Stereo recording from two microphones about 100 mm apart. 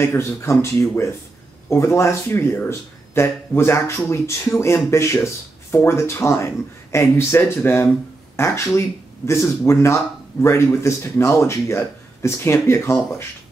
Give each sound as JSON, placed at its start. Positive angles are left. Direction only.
{"t": 0.0, "sound": "speech", "side_deg": 25}